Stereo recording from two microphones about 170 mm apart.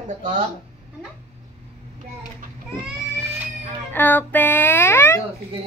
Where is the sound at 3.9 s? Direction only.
10° left (ahead or behind).